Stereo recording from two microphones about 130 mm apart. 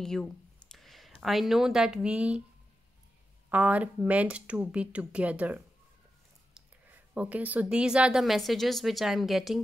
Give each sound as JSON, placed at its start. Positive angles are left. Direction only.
{"t": 0.0, "sound": "speech", "side_deg": 5}
{"t": 3.4, "sound": "speech", "side_deg": -10}
{"t": 6.9, "sound": "a woman's voice", "side_deg": -10}